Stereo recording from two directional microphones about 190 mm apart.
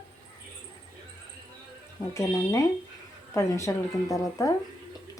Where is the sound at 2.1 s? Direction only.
15° left (ahead or behind).